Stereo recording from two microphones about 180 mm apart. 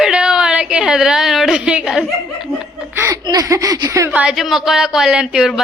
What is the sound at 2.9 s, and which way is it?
Speech, 20° right (ahead or behind).